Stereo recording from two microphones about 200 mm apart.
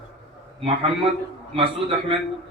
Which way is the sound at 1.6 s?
25° right (ahead or behind).